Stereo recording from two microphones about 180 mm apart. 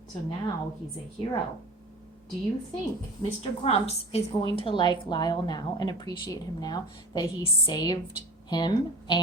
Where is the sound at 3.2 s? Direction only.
35° left (ahead or behind).